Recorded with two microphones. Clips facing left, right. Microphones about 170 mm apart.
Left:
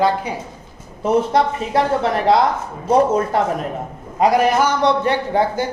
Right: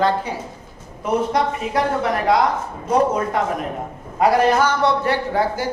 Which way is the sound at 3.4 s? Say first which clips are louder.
Left 2 dB; 30° left (ahead or behind).